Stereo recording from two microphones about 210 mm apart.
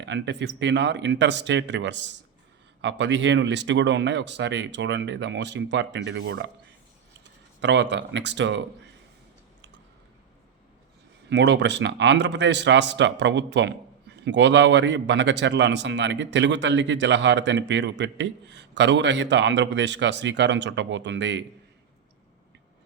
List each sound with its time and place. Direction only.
0.0 s speech: 55° right (ahead or behind)
7.6 s speech: 55° right (ahead or behind)
11.3 s speech: 55° right (ahead or behind)